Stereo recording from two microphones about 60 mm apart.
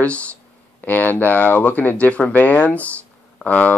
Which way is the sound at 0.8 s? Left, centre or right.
Left.